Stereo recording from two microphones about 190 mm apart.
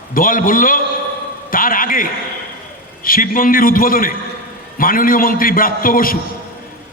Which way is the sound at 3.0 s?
50° left (ahead or behind).